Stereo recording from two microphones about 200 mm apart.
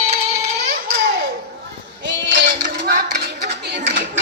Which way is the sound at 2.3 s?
60° right (ahead or behind).